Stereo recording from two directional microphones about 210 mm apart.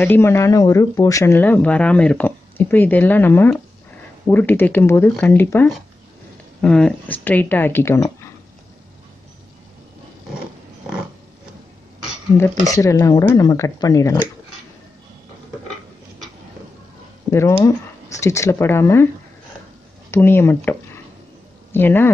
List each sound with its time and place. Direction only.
0.0 s speech: 10° left (ahead or behind)
12.4 s speech: 15° left (ahead or behind)
17.3 s speech: 15° left (ahead or behind)
20.1 s speech: 10° left (ahead or behind)